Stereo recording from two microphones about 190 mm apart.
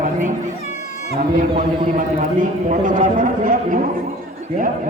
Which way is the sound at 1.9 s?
45° right (ahead or behind).